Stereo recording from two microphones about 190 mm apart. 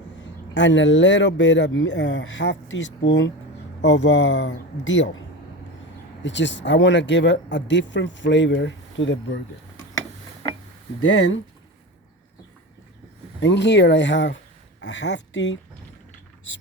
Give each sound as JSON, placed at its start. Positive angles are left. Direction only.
{"t": 0.5, "sound": "speech", "side_deg": 75}
{"t": 6.2, "sound": "speech", "side_deg": 70}
{"t": 11.0, "sound": "speech", "side_deg": 75}
{"t": 13.4, "sound": "speech", "side_deg": 65}